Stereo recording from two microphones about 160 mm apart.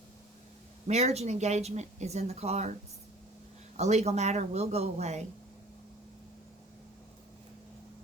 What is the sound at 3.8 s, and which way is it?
A woman's voice, 45° right (ahead or behind).